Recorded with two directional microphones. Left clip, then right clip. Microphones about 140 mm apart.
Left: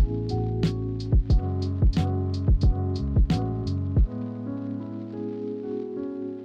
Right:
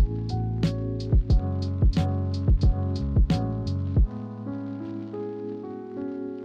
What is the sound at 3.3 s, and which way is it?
Music, 20° left (ahead or behind).